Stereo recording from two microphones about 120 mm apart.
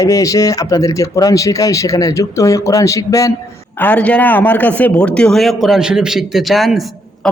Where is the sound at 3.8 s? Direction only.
15° left (ahead or behind).